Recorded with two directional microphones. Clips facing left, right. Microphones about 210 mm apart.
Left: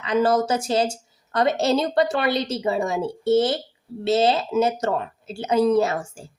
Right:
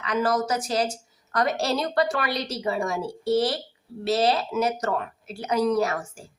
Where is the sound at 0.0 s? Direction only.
25° left (ahead or behind).